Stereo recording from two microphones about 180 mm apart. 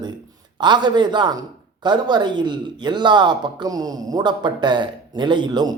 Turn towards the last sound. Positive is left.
turn(degrees=-25)  # may be behind; listen again after turning